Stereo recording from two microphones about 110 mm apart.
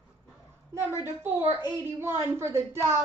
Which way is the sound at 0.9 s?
25° right (ahead or behind).